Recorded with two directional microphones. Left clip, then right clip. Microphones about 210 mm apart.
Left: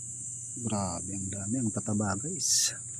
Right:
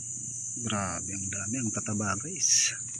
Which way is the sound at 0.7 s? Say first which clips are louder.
Right 1 dB; 10° left (ahead or behind).